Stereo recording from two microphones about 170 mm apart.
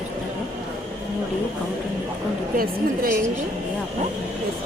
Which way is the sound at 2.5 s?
60° right (ahead or behind).